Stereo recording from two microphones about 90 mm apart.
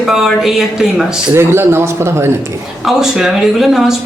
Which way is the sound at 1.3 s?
25° right (ahead or behind).